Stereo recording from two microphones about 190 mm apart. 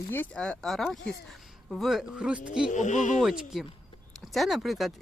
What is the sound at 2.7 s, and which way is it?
Speech, 40° left (ahead or behind).